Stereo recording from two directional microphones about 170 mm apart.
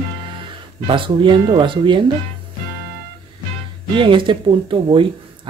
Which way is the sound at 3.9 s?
30° right (ahead or behind).